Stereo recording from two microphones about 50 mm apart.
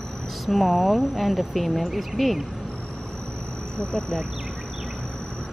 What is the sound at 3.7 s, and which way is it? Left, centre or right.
Speech, centre.